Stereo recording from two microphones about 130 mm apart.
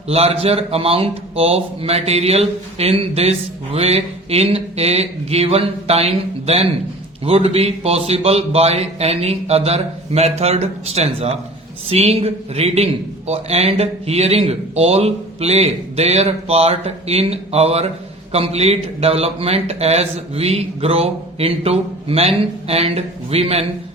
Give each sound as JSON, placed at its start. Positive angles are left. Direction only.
{"t": 0.1, "sound": "speech", "side_deg": -50}